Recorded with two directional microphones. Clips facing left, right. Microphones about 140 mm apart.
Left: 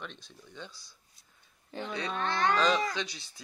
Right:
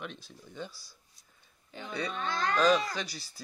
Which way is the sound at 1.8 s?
85° left.